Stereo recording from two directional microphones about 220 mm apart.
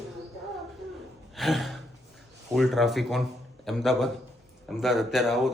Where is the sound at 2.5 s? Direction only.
Centre (ahead or behind).